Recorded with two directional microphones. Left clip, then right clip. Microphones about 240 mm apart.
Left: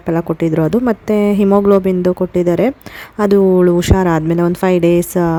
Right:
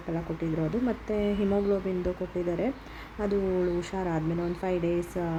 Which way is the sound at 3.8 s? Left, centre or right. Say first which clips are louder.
Left 17 dB; left.